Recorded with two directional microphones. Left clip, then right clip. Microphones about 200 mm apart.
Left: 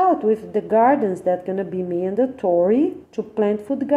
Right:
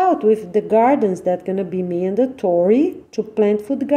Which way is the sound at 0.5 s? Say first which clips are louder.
Left 1 dB; 15° right (ahead or behind).